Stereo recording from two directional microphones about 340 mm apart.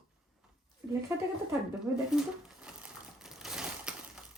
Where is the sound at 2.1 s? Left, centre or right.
Centre.